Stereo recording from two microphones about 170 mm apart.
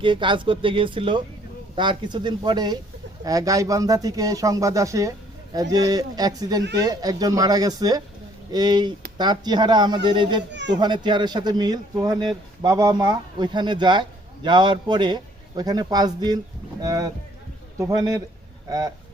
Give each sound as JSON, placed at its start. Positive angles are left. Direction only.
{"t": 0.0, "sound": "speech", "side_deg": -30}
{"t": 10.5, "sound": "a child's voice", "side_deg": -90}
{"t": 10.8, "sound": "speech", "side_deg": -25}